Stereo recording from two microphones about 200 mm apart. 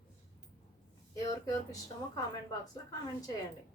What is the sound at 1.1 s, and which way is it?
Speech, 20° left (ahead or behind).